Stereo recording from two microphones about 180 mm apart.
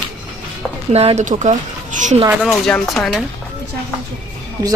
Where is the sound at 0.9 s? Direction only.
35° right (ahead or behind).